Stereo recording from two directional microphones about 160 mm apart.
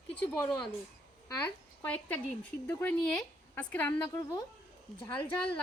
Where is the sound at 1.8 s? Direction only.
10° left (ahead or behind).